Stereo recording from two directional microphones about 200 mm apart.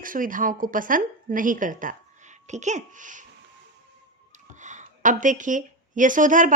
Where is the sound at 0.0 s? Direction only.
45° right (ahead or behind).